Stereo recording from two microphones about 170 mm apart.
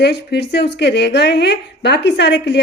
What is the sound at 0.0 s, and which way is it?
A woman's voice, 75° left (ahead or behind).